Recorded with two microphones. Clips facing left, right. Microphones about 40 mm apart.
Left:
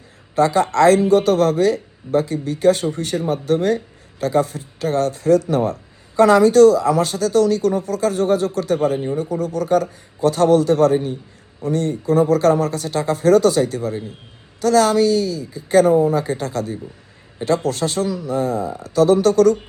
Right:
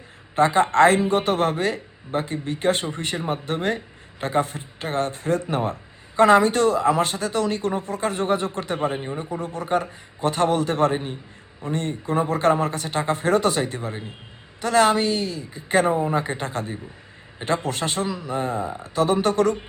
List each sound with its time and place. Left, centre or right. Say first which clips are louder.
0.3 s speech: left 1 dB; right